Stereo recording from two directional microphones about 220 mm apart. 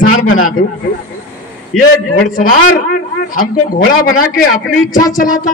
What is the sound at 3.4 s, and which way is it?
Speech, 40° left (ahead or behind).